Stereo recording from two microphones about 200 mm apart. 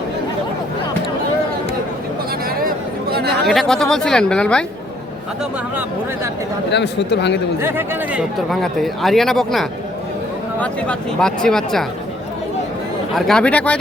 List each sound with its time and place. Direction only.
2.6 s chatter: 50° right (ahead or behind)
3.4 s speech: centre (ahead or behind)
6.7 s speech: 60° left (ahead or behind)
7.6 s speech: 10° right (ahead or behind)
13.1 s speech: 5° left (ahead or behind)